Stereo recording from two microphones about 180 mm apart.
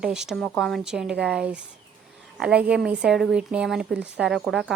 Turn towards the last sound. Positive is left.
turn(degrees=0)  # may be behind; listen again after turning